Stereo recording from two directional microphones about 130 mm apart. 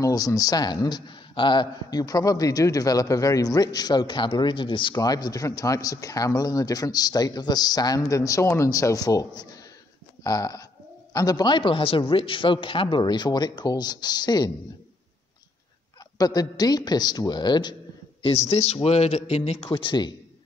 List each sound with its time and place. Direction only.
0.0 s a man's voice: 25° left (ahead or behind)
16.2 s a man's voice: 30° left (ahead or behind)
18.2 s a man's voice: 55° left (ahead or behind)
19.7 s a man's voice: 35° left (ahead or behind)